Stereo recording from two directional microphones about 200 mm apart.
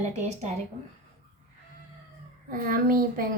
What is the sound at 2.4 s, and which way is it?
Speech, 45° right (ahead or behind).